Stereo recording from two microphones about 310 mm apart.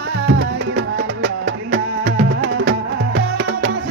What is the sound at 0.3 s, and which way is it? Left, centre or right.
Music, right.